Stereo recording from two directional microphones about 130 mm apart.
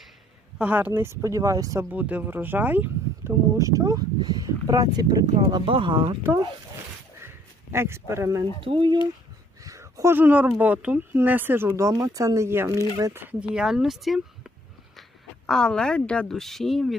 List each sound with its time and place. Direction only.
0.6 s speech: 15° right (ahead or behind)
1.9 s speech: 10° right (ahead or behind)
3.6 s speech: 25° right (ahead or behind)
7.2 s a sound: 20° right (ahead or behind)
8.6 s speech: 40° right (ahead or behind)
9.6 s speech: 25° right (ahead or behind); by 16.9 s centre (ahead or behind)